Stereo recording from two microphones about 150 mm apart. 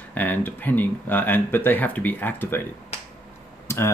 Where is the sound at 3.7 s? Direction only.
15° left (ahead or behind).